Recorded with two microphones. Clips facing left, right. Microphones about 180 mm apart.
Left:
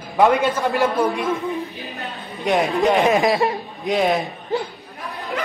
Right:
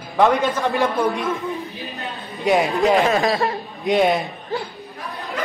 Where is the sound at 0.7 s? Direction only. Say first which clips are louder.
Left 1 dB; centre (ahead or behind).